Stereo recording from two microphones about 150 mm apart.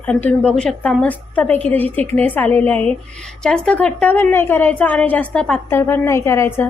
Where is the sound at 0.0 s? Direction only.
10° left (ahead or behind).